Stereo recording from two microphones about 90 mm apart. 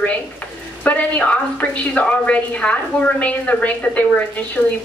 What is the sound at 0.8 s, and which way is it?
A woman's voice, 15° left (ahead or behind).